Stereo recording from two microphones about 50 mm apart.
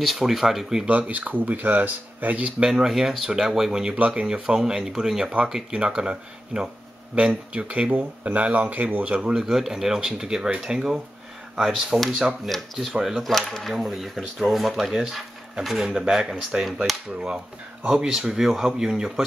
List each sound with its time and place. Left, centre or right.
0.0 s speech: centre
0.8 s speech: right
2.6 s speech: centre; by 9.4 s right
9.4 s speech: centre
13.3 s speech: centre
17.8 s speech: centre